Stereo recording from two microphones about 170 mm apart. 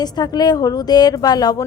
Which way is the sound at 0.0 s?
25° left (ahead or behind).